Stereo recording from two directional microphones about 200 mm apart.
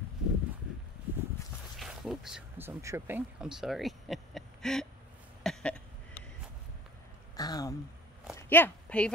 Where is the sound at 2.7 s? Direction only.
15° right (ahead or behind); by 4.8 s centre (ahead or behind).